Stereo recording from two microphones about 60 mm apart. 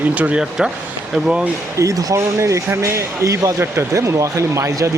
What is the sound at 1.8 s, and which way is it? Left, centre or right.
Speech, right.